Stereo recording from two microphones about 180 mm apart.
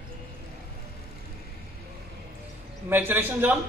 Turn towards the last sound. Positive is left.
turn(degrees=-10)  # may be behind; listen again after turning